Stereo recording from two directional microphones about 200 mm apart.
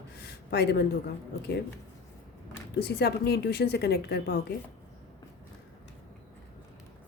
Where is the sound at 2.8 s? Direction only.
55° left (ahead or behind).